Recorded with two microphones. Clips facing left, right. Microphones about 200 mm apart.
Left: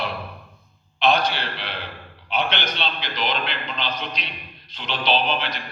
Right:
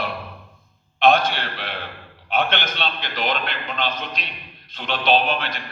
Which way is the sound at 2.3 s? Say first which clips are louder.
Right 2 dB; 50° right (ahead or behind).